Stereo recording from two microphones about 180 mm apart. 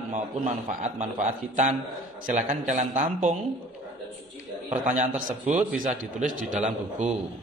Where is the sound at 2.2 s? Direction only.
45° right (ahead or behind).